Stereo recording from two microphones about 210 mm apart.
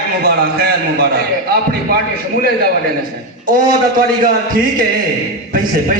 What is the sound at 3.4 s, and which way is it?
A man's voice, 40° right (ahead or behind).